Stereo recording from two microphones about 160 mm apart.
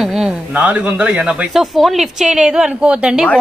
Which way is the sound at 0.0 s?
5° right (ahead or behind).